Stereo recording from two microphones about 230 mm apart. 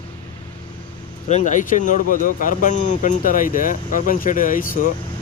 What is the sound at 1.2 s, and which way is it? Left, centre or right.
Speech, left.